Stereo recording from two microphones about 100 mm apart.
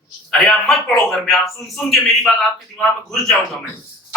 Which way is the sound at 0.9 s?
Centre (ahead or behind).